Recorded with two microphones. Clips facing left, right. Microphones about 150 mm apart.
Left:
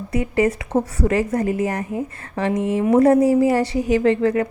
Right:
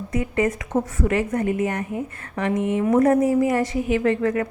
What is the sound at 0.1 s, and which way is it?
A woman's voice, 30° left (ahead or behind).